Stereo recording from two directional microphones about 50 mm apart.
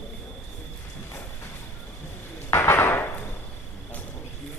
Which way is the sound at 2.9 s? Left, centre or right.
Left.